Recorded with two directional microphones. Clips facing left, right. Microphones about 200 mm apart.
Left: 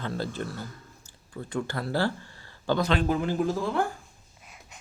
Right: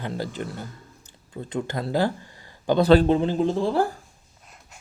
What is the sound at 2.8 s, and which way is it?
Speech, 35° right (ahead or behind).